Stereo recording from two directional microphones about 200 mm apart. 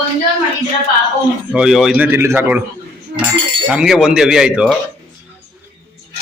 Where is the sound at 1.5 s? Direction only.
Centre (ahead or behind).